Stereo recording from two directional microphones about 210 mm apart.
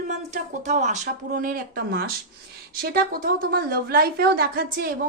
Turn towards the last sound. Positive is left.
turn(degrees=-45)  # may be behind; listen again after turning